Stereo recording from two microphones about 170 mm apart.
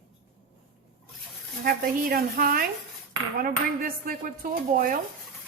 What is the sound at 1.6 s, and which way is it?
A woman's voice, 60° right (ahead or behind).